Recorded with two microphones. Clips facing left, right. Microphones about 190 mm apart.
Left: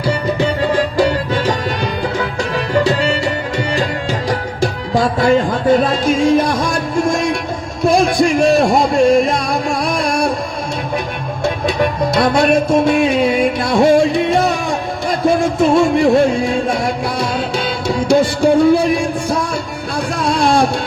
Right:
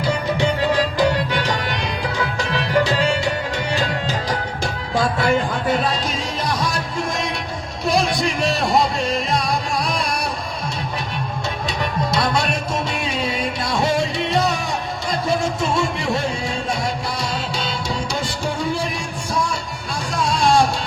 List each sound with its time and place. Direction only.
5.5 s music: 50° left (ahead or behind)
7.9 s music: 50° left (ahead or behind)
11.4 s music: 55° left (ahead or behind)